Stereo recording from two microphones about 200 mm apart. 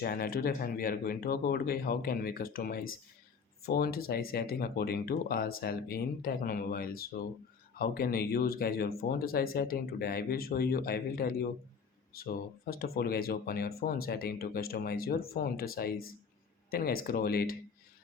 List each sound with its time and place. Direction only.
0.0 s speech: 50° left (ahead or behind)